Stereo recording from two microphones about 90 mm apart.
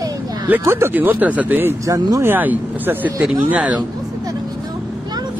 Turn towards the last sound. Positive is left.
turn(degrees=-15)  # may be behind; listen again after turning